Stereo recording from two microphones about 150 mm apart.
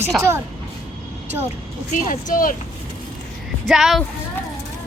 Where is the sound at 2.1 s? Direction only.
65° left (ahead or behind).